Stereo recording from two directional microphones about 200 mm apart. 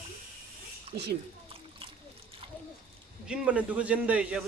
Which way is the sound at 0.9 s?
50° right (ahead or behind).